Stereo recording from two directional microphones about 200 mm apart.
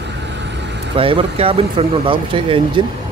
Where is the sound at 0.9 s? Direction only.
25° right (ahead or behind).